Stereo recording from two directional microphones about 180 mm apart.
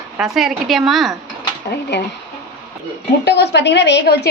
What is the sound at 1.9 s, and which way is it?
Speech, 75° left (ahead or behind).